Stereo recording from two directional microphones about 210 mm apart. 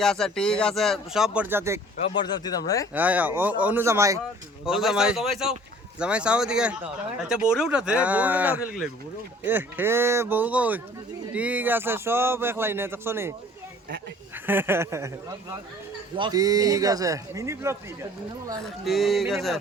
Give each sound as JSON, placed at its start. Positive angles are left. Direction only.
{"t": 0.0, "sound": "speech", "side_deg": 0}
{"t": 2.0, "sound": "speech", "side_deg": 20}
{"t": 2.9, "sound": "speech", "side_deg": -10}
{"t": 4.6, "sound": "speech", "side_deg": 0}
{"t": 14.4, "sound": "speech", "side_deg": -10}
{"t": 16.1, "sound": "speech", "side_deg": -20}
{"t": 18.6, "sound": "speech", "side_deg": 0}